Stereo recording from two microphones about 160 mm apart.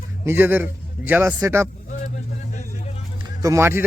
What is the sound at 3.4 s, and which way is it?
Speech, 15° right (ahead or behind).